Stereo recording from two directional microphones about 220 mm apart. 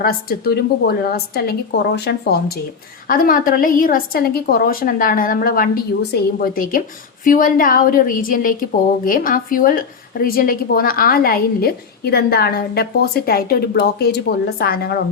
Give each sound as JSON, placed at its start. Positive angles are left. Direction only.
{"t": 0.0, "sound": "a woman's voice", "side_deg": 45}